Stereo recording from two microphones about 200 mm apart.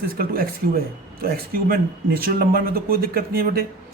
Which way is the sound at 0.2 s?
45° right (ahead or behind).